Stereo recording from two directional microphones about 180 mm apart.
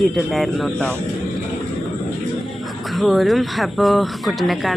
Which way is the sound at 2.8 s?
Centre (ahead or behind).